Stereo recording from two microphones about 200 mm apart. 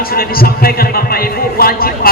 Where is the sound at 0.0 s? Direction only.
50° left (ahead or behind).